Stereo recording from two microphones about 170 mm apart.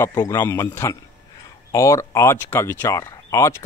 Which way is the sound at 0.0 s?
15° left (ahead or behind).